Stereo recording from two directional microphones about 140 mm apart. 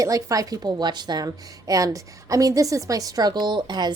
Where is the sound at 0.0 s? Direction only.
25° right (ahead or behind).